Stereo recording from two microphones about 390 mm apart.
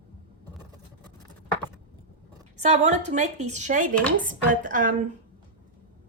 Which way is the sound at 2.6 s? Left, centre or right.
Centre.